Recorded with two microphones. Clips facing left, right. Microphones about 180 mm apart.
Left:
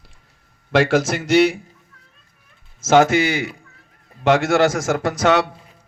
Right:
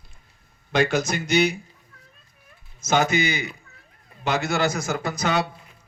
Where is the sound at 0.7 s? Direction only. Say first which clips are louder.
Left 5 dB; 90° left.